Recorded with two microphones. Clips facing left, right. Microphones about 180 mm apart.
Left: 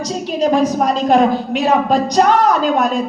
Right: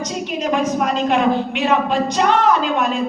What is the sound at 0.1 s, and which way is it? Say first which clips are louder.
A woman's voice: left 7 dB; 35° left (ahead or behind).